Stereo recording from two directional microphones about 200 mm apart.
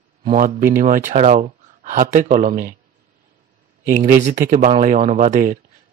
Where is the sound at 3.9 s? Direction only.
40° right (ahead or behind).